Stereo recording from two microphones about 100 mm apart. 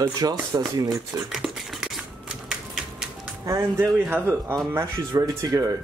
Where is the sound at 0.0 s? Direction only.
40° right (ahead or behind).